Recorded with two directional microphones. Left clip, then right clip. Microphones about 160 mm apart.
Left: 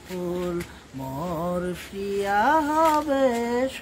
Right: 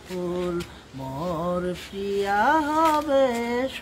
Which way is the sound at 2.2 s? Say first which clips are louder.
Even; 10° left (ahead or behind).